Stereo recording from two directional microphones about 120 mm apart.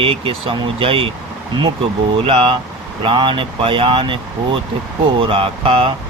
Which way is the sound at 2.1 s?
45° right (ahead or behind).